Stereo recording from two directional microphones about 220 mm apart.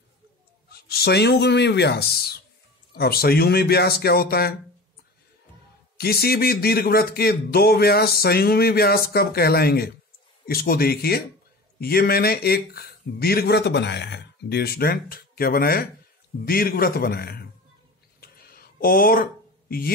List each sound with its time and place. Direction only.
0.7 s speech: 45° left (ahead or behind)
5.9 s speech: 45° left (ahead or behind)
18.2 s a sound: 40° left (ahead or behind)